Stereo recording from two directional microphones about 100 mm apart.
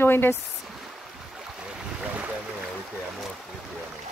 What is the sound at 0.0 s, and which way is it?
Speech, 20° left (ahead or behind).